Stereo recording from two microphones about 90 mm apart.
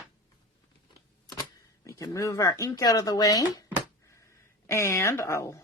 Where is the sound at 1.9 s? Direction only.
40° left (ahead or behind).